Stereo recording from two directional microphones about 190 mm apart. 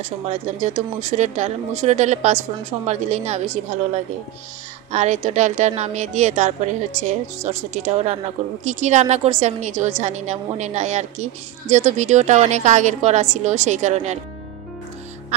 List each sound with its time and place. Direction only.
0.0 s speech: 35° right (ahead or behind)